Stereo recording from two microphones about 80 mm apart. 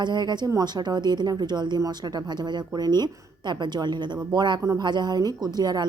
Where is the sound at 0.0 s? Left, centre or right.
Right.